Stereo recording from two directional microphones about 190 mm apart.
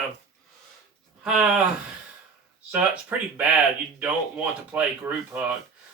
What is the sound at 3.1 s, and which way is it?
Speech, 10° right (ahead or behind).